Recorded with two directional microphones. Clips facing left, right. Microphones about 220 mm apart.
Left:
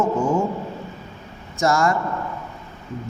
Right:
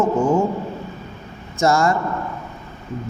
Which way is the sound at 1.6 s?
25° right (ahead or behind).